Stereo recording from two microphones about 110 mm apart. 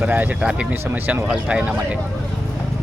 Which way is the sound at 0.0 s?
15° right (ahead or behind).